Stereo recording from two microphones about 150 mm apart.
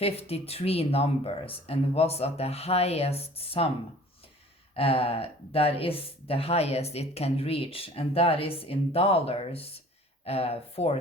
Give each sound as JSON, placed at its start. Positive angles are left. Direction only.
{"t": 0.0, "sound": "speech", "side_deg": 40}
{"t": 4.7, "sound": "speech", "side_deg": 40}